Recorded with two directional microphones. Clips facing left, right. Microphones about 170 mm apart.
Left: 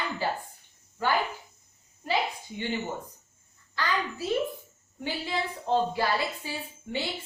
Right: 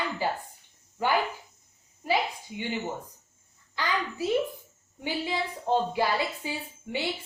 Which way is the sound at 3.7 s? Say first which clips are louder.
Even; 15° right (ahead or behind).